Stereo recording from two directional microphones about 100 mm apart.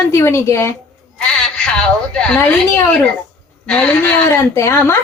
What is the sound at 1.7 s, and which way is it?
Speech, 10° left (ahead or behind).